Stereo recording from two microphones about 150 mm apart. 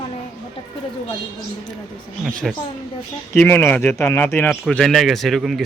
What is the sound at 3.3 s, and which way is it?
Speech, 15° left (ahead or behind).